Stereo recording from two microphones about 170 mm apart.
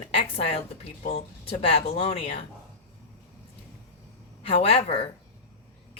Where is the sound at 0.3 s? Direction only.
35° left (ahead or behind).